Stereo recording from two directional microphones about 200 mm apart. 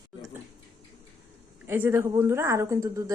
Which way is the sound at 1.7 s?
10° right (ahead or behind).